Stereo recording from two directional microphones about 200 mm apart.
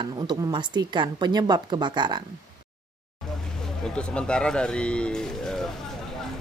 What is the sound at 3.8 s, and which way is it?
Speech, 5° left (ahead or behind).